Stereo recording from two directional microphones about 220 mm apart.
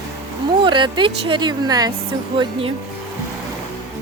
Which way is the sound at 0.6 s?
20° right (ahead or behind).